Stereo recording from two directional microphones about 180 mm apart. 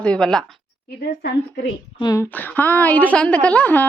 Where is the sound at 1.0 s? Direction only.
60° left (ahead or behind).